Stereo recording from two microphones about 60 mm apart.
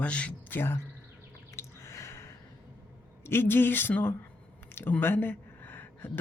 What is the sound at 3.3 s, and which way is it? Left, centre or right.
Speech, left.